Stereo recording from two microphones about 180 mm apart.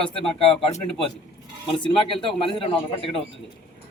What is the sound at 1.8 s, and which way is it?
Speech, 30° left (ahead or behind).